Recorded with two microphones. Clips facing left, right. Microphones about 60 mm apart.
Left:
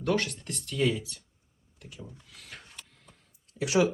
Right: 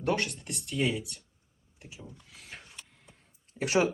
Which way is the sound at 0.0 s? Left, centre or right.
Centre.